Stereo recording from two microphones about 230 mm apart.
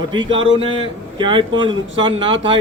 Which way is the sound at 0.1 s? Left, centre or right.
Right.